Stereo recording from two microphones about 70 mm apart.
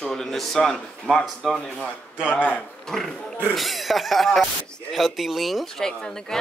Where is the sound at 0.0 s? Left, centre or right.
Centre.